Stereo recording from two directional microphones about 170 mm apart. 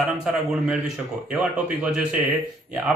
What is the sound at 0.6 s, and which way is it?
Speech, 5° right (ahead or behind).